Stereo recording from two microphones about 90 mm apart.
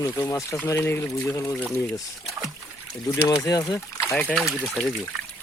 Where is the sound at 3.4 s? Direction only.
40° left (ahead or behind).